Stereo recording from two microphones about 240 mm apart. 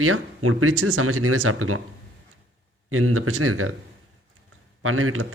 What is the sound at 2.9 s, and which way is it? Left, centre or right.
Speech, right.